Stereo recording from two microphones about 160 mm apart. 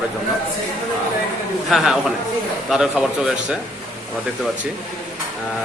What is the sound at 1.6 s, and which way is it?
A man's voice, centre (ahead or behind).